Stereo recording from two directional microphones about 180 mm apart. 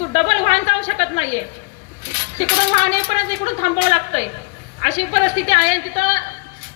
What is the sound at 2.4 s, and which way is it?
A woman's voice, 40° left (ahead or behind).